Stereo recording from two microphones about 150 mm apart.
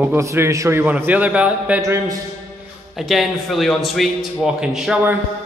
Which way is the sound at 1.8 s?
20° right (ahead or behind).